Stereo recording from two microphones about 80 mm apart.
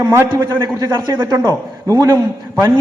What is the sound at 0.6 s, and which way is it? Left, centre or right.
Speech, right.